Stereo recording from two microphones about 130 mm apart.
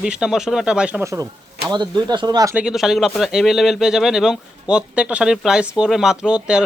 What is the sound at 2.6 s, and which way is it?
A man's voice, 5° right (ahead or behind).